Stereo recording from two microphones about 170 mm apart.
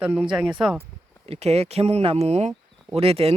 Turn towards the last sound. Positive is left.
turn(degrees=-35)  # may be behind; listen again after turning